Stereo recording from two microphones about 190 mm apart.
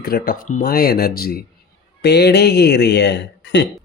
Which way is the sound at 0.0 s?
50° left (ahead or behind).